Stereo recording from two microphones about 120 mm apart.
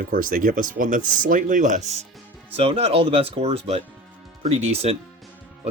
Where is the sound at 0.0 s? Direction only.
90° right; by 2.0 s 70° right (ahead or behind).